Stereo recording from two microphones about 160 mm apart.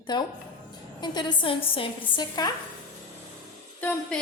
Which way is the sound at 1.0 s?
30° left (ahead or behind).